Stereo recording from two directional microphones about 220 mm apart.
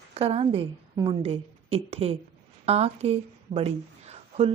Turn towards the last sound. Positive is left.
turn(degrees=-30)  # may be behind; listen again after turning